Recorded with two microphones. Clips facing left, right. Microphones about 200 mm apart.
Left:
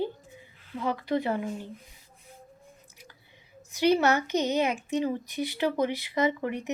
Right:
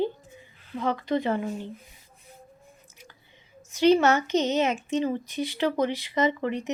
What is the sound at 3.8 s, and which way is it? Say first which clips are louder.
Speech: right 3 dB; 15° left (ahead or behind).